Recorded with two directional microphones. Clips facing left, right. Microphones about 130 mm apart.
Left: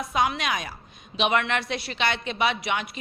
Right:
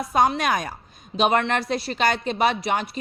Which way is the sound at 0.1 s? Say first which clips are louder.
Right 5 dB; 45° right (ahead or behind).